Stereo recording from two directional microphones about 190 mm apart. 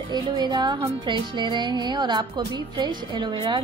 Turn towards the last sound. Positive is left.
turn(degrees=-25)  # may be behind; listen again after turning